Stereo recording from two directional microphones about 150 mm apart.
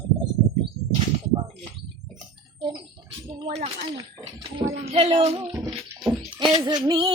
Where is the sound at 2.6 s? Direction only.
35° right (ahead or behind).